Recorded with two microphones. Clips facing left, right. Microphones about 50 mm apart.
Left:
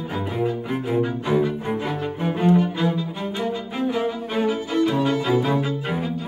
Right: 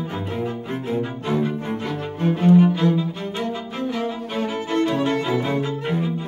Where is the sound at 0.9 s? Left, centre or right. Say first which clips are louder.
Left 3 dB; centre.